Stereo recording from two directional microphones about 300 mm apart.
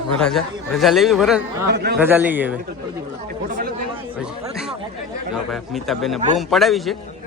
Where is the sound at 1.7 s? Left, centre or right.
Right.